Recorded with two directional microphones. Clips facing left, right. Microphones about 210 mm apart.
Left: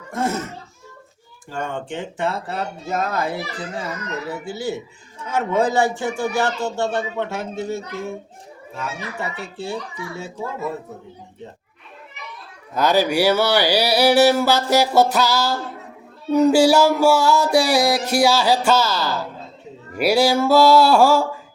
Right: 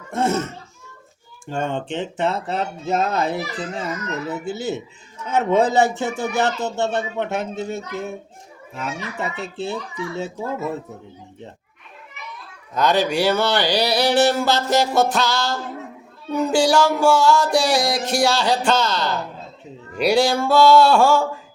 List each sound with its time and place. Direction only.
0.1 s speech: 25° right (ahead or behind)
1.5 s speech: 25° right (ahead or behind)
12.7 s a sound: 5° left (ahead or behind)